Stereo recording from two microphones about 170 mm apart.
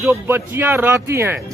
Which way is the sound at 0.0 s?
15° right (ahead or behind).